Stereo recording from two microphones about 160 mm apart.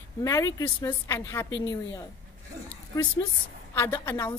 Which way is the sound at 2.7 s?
20° left (ahead or behind).